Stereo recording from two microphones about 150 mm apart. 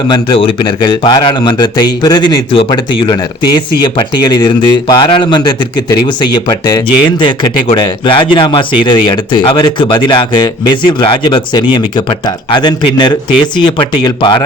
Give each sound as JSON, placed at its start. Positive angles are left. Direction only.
{"t": 0.1, "sound": "speech", "side_deg": 35}